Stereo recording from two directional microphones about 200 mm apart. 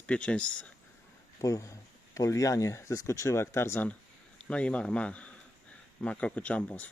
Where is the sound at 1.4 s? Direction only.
15° left (ahead or behind).